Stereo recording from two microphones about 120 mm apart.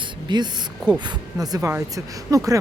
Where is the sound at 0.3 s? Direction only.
40° right (ahead or behind).